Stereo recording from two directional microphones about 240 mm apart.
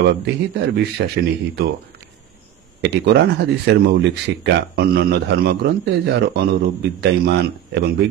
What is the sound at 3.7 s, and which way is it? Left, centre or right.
A man's voice, right.